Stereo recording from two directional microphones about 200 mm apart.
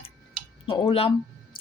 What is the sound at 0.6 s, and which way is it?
Speech, 25° left (ahead or behind).